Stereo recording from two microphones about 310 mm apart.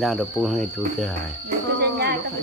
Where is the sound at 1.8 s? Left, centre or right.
Right.